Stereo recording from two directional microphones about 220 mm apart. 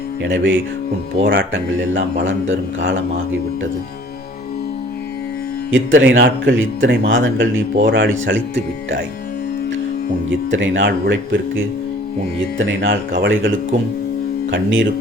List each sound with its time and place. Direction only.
0.2 s speech: 60° right (ahead or behind)
1.2 s speech: 50° right (ahead or behind)
5.7 s speech: 60° right (ahead or behind)
10.5 s speech: 60° right (ahead or behind)
14.5 s speech: 55° right (ahead or behind)